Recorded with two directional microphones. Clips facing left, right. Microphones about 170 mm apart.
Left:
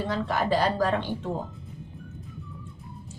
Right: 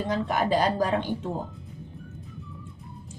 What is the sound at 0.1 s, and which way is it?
Speech, 15° right (ahead or behind).